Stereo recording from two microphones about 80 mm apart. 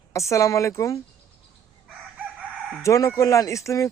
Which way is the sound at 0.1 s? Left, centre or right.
Left.